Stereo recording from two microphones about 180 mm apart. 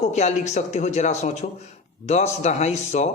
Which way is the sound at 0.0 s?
40° left (ahead or behind).